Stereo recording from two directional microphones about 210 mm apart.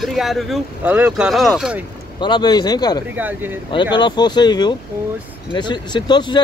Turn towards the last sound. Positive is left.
turn(degrees=20)  # may be behind; listen again after turning